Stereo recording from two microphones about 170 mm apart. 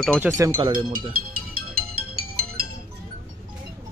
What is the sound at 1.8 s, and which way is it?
Music, 65° right (ahead or behind).